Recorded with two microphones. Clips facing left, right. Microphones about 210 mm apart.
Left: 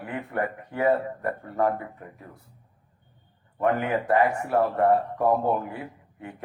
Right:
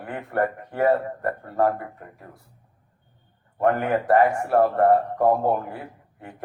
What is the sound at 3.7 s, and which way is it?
A man's voice, 50° right (ahead or behind).